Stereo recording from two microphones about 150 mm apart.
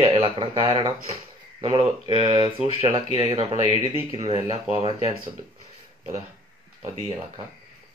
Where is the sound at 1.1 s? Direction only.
40° right (ahead or behind).